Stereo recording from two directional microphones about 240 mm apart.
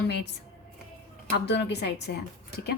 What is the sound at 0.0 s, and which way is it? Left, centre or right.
Speech, left.